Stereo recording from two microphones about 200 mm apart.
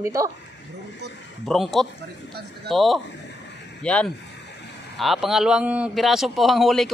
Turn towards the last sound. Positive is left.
turn(degrees=0)  # may be behind; listen again after turning